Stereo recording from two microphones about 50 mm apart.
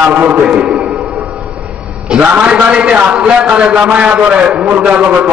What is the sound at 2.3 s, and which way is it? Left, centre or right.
A man's voice, right.